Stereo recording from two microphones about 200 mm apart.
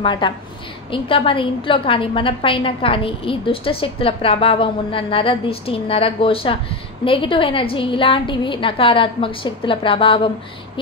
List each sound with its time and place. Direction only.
0.0 s a woman's voice: 25° left (ahead or behind)